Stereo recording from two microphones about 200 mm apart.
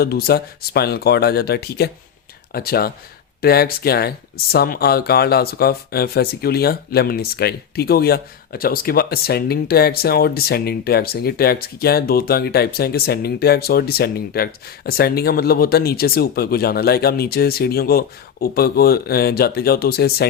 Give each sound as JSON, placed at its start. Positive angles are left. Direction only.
{"t": 0.0, "sound": "speech", "side_deg": 50}